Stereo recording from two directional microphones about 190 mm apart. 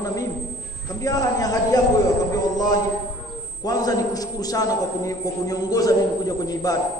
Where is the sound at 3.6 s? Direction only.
20° left (ahead or behind).